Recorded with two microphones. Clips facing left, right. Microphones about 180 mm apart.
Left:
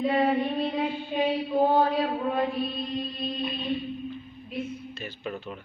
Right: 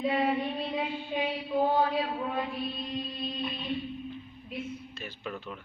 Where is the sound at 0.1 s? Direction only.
45° left (ahead or behind).